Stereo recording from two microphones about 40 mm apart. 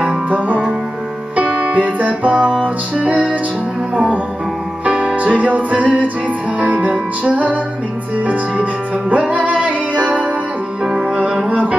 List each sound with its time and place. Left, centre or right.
0.3 s music: right
9.1 s music: right
10.8 s music: centre